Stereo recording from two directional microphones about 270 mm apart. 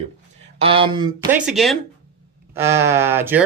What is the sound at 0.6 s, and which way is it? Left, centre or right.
Speech, right.